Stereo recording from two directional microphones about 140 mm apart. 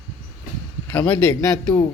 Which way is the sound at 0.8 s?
10° left (ahead or behind).